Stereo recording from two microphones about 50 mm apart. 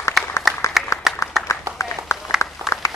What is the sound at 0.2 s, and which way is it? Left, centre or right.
Applause, centre.